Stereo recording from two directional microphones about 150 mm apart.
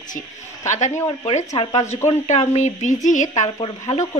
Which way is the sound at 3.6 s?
45° left (ahead or behind).